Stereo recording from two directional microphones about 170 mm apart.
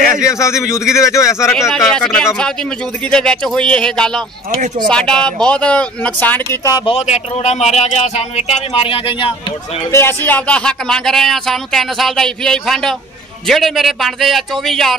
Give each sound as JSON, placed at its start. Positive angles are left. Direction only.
{"t": 0.3, "sound": "speech", "side_deg": 15}
{"t": 1.9, "sound": "speech", "side_deg": 5}
{"t": 6.7, "sound": "speech", "side_deg": 35}
{"t": 9.9, "sound": "speech", "side_deg": 10}